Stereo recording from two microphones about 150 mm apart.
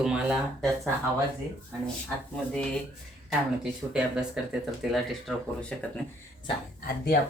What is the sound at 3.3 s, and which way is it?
Speech, 5° right (ahead or behind).